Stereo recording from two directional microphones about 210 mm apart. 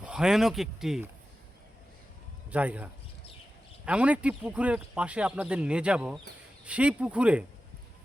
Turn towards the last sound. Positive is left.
turn(degrees=-5)  # may be behind; listen again after turning